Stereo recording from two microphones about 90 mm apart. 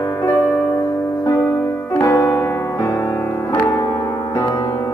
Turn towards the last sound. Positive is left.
turn(degrees=35)  # may be behind; listen again after turning